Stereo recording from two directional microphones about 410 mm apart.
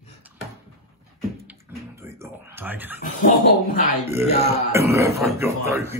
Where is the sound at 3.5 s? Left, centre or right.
Centre.